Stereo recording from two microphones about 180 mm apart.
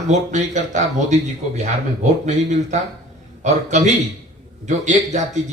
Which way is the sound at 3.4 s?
40° right (ahead or behind).